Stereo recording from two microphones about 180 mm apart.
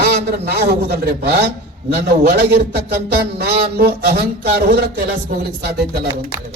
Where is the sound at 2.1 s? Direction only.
40° right (ahead or behind).